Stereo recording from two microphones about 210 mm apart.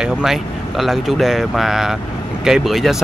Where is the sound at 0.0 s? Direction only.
Centre (ahead or behind).